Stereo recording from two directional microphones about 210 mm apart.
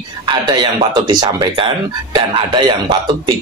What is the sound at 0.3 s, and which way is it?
Speech, 20° right (ahead or behind).